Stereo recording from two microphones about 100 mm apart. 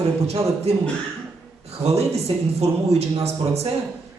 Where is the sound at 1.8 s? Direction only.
90° right.